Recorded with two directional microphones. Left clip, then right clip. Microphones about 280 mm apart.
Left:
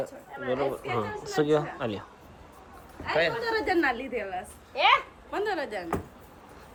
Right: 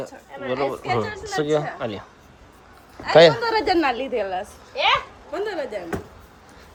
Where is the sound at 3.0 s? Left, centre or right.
Right.